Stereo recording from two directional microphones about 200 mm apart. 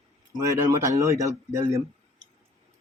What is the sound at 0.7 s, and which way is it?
Speech, 15° right (ahead or behind).